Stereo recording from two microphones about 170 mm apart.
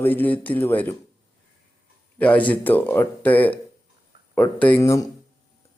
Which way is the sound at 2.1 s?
10° left (ahead or behind).